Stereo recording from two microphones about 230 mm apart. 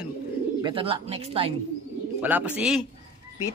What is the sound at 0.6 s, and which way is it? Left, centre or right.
Speech, right.